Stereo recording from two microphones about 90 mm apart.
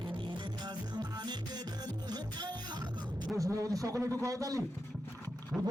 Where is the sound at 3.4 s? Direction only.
35° right (ahead or behind).